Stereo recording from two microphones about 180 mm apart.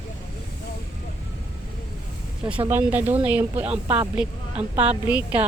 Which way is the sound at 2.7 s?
10° right (ahead or behind).